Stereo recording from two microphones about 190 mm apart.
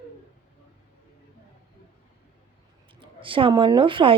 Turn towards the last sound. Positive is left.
turn(degrees=-25)  # may be behind; listen again after turning